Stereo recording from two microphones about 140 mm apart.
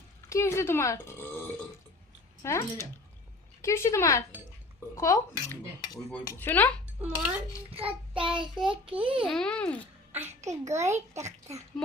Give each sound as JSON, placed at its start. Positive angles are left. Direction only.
{"t": 0.3, "sound": "speech", "side_deg": 20}
{"t": 6.2, "sound": "a child's voice", "side_deg": 15}
{"t": 7.0, "sound": "dishes", "side_deg": -10}
{"t": 7.9, "sound": "child singing", "side_deg": -40}
{"t": 8.7, "sound": "a child's voice", "side_deg": -40}
{"t": 9.2, "sound": "a child's voice", "side_deg": 5}
{"t": 10.1, "sound": "a child's voice", "side_deg": -15}
{"t": 10.9, "sound": "a child's voice", "side_deg": -55}